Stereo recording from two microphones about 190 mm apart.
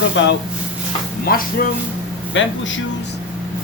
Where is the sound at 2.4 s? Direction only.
90° left.